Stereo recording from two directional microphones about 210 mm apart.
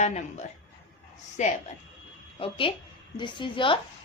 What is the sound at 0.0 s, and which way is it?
A woman's voice, 35° left (ahead or behind).